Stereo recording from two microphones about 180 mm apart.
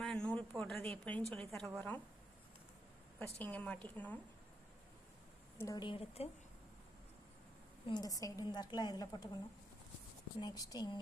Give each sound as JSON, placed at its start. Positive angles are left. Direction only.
{"t": 0.0, "sound": "speech", "side_deg": 5}
{"t": 3.2, "sound": "a woman's voice", "side_deg": 10}
{"t": 5.5, "sound": "a woman's voice", "side_deg": 20}
{"t": 7.9, "sound": "a woman's voice", "side_deg": 20}
{"t": 10.4, "sound": "a woman's voice", "side_deg": 20}